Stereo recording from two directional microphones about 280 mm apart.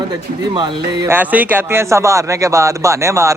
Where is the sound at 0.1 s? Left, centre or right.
Centre.